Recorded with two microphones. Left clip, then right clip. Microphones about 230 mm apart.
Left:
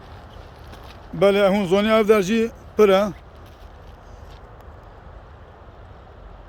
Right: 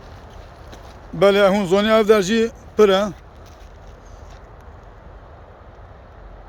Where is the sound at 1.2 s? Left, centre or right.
Centre.